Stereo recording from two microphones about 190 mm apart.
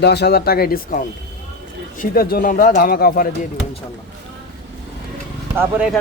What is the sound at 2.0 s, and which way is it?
A man's voice, 50° left (ahead or behind).